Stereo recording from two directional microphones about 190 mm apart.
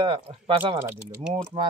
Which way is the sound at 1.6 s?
25° right (ahead or behind).